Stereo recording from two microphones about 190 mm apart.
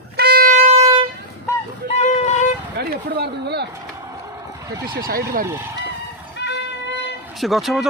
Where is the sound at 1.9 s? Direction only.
35° left (ahead or behind).